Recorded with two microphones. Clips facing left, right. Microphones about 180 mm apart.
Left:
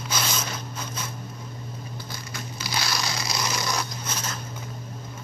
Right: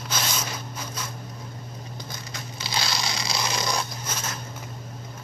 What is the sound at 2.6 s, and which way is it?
Zipper, 25° right (ahead or behind).